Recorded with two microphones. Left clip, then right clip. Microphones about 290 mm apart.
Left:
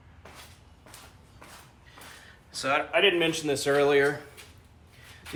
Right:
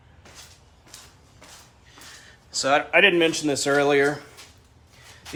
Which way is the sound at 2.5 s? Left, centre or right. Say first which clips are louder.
Right 6 dB; centre.